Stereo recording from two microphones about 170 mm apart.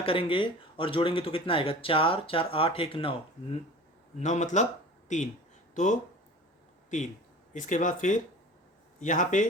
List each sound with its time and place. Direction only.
0.0 s speech: 30° left (ahead or behind)
4.2 s speech: 45° left (ahead or behind)
7.5 s speech: 50° left (ahead or behind)